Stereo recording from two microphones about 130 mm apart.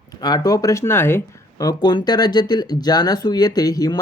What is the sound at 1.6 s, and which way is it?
Speech, 35° left (ahead or behind).